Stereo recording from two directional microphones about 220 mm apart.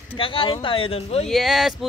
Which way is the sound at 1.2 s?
Centre (ahead or behind).